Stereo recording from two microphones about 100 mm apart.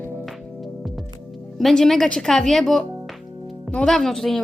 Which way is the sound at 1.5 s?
5° left (ahead or behind).